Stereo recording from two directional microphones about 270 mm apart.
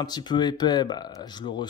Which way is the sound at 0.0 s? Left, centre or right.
Centre.